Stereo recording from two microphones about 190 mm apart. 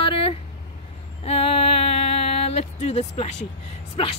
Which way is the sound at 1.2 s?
30° left (ahead or behind).